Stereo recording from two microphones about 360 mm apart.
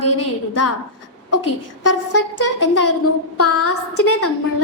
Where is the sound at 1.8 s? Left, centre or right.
Left.